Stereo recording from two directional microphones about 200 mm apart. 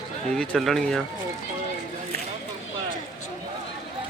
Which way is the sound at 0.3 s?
Centre (ahead or behind).